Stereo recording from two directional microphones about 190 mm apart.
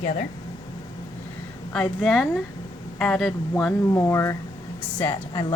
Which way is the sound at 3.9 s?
15° left (ahead or behind).